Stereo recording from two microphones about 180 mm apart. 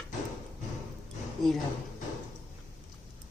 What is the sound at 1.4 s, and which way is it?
Speech, centre (ahead or behind).